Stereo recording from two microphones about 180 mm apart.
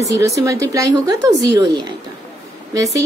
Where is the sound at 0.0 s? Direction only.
15° right (ahead or behind).